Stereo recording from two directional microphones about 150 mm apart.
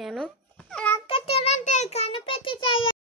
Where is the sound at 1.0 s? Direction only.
40° left (ahead or behind).